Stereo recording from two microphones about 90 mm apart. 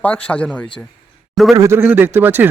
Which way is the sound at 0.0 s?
15° left (ahead or behind).